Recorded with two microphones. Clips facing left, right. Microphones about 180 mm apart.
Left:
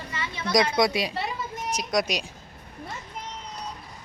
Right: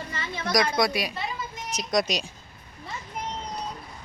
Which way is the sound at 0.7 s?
25° left (ahead or behind).